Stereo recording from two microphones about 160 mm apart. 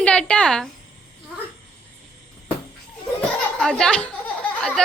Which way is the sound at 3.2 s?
5° left (ahead or behind).